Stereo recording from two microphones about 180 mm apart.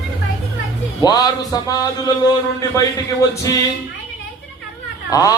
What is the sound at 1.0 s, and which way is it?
A man's voice, 20° left (ahead or behind).